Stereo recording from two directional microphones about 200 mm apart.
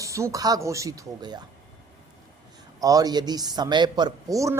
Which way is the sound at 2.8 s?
20° right (ahead or behind).